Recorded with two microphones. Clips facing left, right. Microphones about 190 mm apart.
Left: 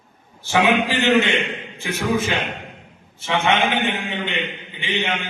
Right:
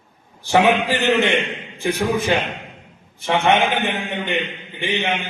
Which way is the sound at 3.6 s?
15° left (ahead or behind).